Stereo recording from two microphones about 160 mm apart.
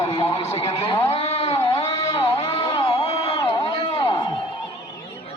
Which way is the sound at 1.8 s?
20° left (ahead or behind).